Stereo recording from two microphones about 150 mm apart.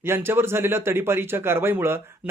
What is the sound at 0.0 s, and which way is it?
Speech, 15° right (ahead or behind).